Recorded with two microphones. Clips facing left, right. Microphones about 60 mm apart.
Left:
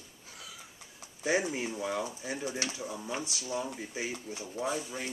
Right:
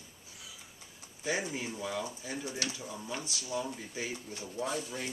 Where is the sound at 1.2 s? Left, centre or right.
Left.